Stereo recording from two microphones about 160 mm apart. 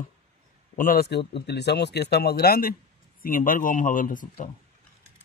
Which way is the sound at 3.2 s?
60° left (ahead or behind).